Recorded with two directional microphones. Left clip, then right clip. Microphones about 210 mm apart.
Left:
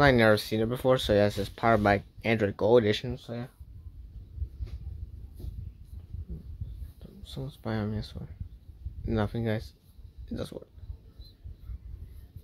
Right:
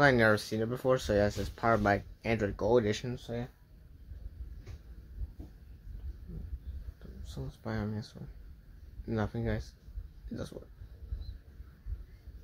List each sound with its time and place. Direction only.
0.0 s speech: 30° left (ahead or behind)
7.2 s speech: 30° left (ahead or behind)